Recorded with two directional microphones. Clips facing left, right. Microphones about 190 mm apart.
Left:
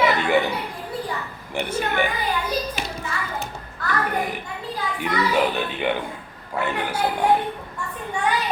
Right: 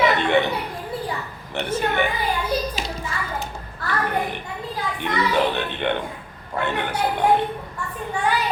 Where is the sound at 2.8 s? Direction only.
60° left (ahead or behind).